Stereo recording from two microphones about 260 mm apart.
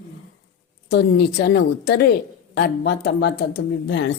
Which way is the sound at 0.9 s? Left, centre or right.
Left.